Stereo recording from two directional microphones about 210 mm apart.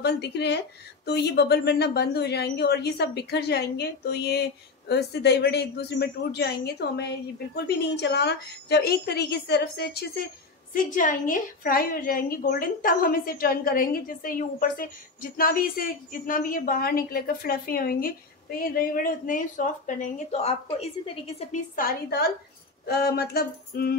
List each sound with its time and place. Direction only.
0.0 s speech: 50° left (ahead or behind)
10.7 s a woman's voice: 40° left (ahead or behind)
21.7 s speech: 45° left (ahead or behind)